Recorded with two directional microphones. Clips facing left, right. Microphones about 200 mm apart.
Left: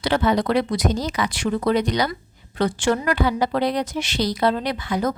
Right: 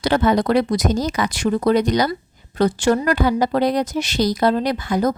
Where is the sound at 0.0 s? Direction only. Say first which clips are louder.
Right 3 dB; 45° right (ahead or behind).